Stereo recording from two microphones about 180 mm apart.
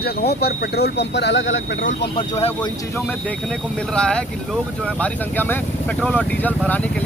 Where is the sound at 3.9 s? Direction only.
5° left (ahead or behind).